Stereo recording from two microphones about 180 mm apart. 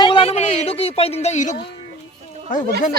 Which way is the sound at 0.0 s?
30° left (ahead or behind).